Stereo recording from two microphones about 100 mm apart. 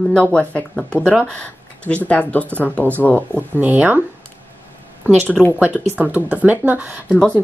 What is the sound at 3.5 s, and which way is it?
Speech, 15° right (ahead or behind).